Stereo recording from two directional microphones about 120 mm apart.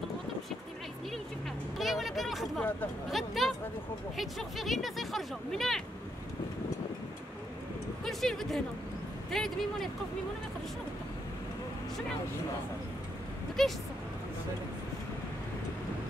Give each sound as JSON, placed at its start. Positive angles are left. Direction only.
{"t": 1.8, "sound": "a sound", "side_deg": 0}
{"t": 3.1, "sound": "speech", "side_deg": 0}
{"t": 8.0, "sound": "speech", "side_deg": 5}
{"t": 13.6, "sound": "speech", "side_deg": 0}